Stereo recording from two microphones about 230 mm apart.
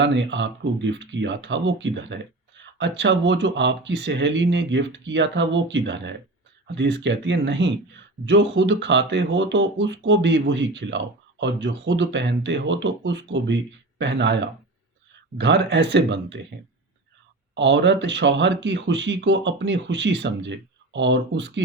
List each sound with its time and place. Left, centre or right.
0.0 s speech: right
17.5 s speech: right